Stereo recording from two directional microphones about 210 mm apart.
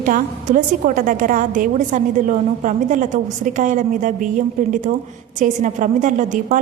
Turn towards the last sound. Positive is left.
turn(degrees=-35)  # may be behind; listen again after turning